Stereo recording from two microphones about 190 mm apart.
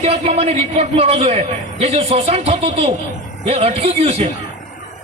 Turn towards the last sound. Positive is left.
turn(degrees=-30)  # may be behind; listen again after turning